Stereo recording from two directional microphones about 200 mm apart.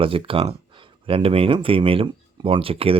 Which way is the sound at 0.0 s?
25° right (ahead or behind).